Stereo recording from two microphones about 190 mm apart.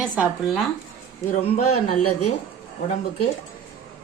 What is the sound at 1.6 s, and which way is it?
Speech, 35° left (ahead or behind).